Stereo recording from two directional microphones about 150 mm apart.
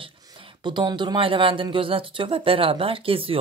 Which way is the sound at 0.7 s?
30° right (ahead or behind).